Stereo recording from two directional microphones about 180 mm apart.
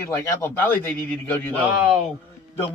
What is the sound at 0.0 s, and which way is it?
A man's voice, 15° left (ahead or behind).